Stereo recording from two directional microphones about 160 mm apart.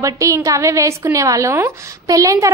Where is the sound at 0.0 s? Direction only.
20° right (ahead or behind).